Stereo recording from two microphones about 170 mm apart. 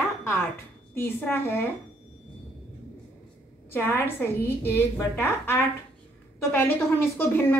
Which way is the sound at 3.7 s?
10° left (ahead or behind).